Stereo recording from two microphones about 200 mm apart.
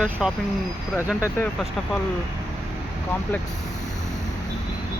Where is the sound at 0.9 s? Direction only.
10° left (ahead or behind).